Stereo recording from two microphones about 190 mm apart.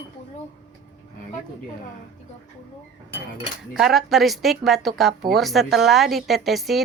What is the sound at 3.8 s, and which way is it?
Speech, centre (ahead or behind).